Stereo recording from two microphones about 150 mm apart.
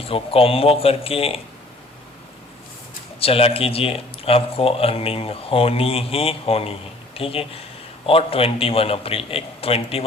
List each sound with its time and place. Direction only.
0.0 s speech: 40° left (ahead or behind)
3.2 s speech: 40° left (ahead or behind)